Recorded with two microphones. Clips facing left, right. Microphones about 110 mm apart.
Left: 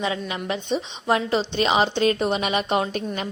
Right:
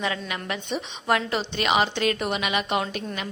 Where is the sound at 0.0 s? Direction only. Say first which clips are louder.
Left 3 dB; 20° left (ahead or behind).